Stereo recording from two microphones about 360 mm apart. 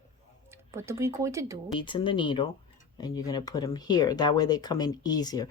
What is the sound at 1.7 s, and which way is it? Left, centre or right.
Speech, centre.